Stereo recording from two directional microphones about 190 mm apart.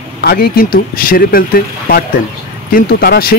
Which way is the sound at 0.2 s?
55° left (ahead or behind).